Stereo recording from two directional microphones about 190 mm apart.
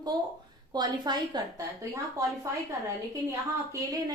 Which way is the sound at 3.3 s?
15° right (ahead or behind).